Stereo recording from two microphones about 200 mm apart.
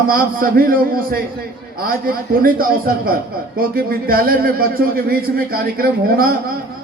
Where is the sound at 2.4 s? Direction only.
45° right (ahead or behind).